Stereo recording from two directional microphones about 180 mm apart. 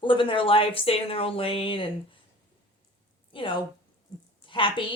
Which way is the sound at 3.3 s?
30° left (ahead or behind).